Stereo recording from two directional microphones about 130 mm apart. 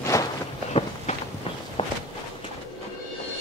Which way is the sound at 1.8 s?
45° left (ahead or behind).